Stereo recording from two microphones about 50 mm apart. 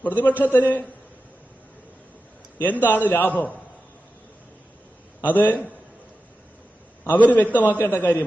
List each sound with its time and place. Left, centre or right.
0.0 s a man's voice: left
2.6 s a man's voice: left
5.2 s a man's voice: left
7.0 s a man's voice: left